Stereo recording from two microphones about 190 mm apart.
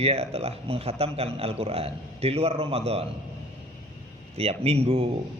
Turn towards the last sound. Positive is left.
turn(degrees=-30)  # may be behind; listen again after turning